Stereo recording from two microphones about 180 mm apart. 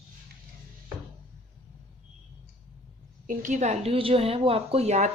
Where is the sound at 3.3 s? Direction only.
45° right (ahead or behind).